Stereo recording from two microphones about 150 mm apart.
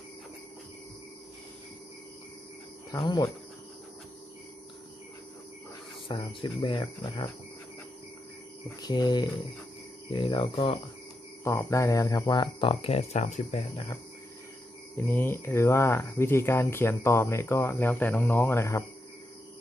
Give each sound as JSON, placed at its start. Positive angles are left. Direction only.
{"t": 2.9, "sound": "speech", "side_deg": 25}
{"t": 6.1, "sound": "speech", "side_deg": 35}
{"t": 8.8, "sound": "speech", "side_deg": 30}
{"t": 11.4, "sound": "speech", "side_deg": 20}
{"t": 14.9, "sound": "speech", "side_deg": 15}